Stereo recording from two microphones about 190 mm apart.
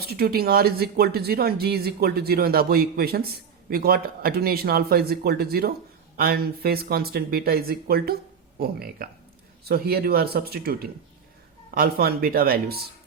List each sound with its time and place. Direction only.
0.0 s speech: 55° right (ahead or behind)